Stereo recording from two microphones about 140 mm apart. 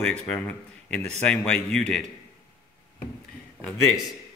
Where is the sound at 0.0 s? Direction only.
10° left (ahead or behind).